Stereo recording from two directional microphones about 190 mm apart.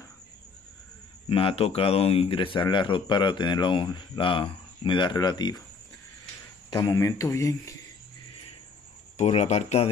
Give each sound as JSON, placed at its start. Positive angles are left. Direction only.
{"t": 1.3, "sound": "speech", "side_deg": 30}
{"t": 6.7, "sound": "speech", "side_deg": 20}
{"t": 9.1, "sound": "speech", "side_deg": 35}